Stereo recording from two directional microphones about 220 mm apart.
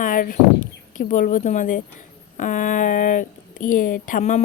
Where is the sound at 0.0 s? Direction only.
40° left (ahead or behind).